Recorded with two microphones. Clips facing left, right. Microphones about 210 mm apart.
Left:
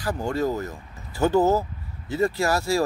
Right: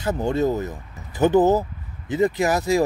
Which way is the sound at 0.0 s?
25° right (ahead or behind).